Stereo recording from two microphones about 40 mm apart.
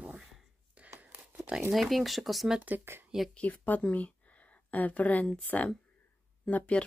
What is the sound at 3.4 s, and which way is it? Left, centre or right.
Speech, left.